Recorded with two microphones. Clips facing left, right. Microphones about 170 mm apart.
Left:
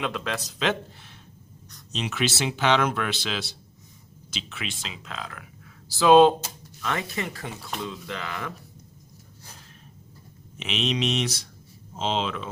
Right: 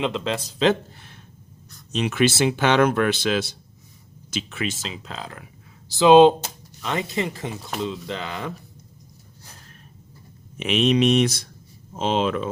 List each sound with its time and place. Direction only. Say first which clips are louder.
0.0 s speech: right 5 dB; 25° right (ahead or behind)
1.9 s speech: right 7 dB; 55° right (ahead or behind); by 8.5 s 25° right (ahead or behind)
10.6 s speech: right 8 dB; 50° right (ahead or behind)